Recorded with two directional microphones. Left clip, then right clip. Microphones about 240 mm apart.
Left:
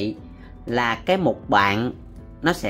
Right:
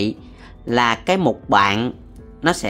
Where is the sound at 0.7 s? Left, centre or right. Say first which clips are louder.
Right 4 dB; centre.